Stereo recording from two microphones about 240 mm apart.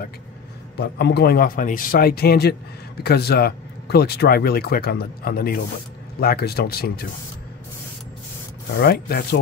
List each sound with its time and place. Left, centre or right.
0.7 s speech: left
8.8 s speech: left